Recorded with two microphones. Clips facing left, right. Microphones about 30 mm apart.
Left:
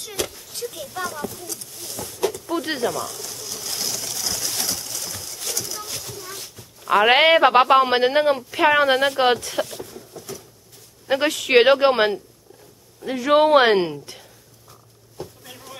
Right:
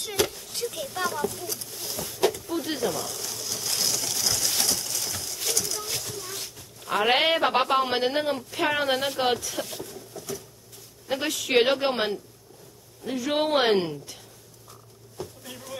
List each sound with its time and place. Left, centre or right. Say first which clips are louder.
0.0 s speech: right 2 dB; centre
0.3 s a sound: right 1 dB; centre
0.7 s speech: even; centre
1.1 s a sound: right 2 dB; centre
4.6 s horse: even; centre
6.4 s a sound: even; centre
6.9 s speech: left 7 dB; left
9.3 s speech: left 6 dB; left
9.7 s patter: left 2 dB; centre
9.9 s patter: left 1 dB; centre
11.1 s speech: left 7 dB; left
13.3 s speech: left 8 dB; left
15.1 s a sound: left 1 dB; centre